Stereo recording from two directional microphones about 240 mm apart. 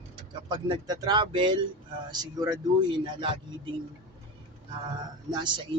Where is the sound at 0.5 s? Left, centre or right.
Centre.